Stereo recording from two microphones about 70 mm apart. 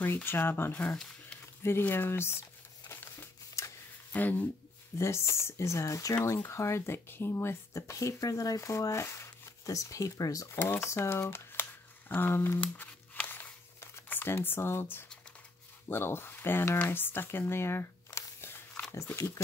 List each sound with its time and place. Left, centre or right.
0.0 s speech: left
2.9 s crumpling: left
4.1 s speech: left
4.9 s speech: left
9.0 s speech: left